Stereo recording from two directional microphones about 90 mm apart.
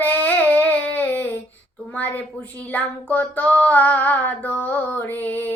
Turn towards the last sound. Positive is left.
turn(degrees=20)  # may be behind; listen again after turning